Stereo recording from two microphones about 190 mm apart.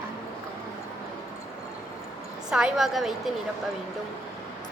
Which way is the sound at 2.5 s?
5° right (ahead or behind).